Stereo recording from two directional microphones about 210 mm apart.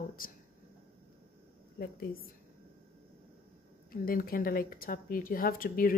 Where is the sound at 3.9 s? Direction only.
45° left (ahead or behind).